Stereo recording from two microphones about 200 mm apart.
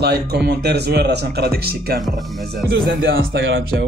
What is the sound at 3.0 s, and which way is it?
Music, 55° right (ahead or behind).